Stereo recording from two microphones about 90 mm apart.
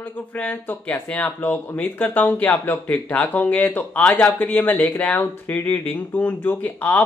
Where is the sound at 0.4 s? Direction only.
15° left (ahead or behind).